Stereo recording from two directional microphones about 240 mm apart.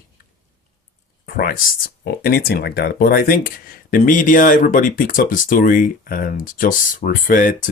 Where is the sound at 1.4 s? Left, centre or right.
Left.